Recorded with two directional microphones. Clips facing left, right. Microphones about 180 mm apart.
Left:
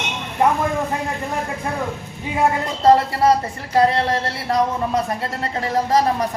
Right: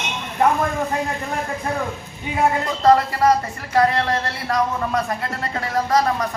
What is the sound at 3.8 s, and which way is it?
A man's voice, 25° left (ahead or behind).